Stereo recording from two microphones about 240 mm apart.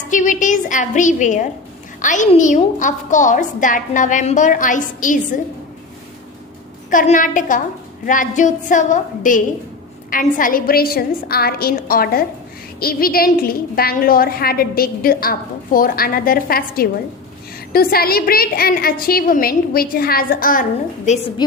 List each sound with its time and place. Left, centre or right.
0.1 s a woman's voice: left
6.9 s a woman's voice: left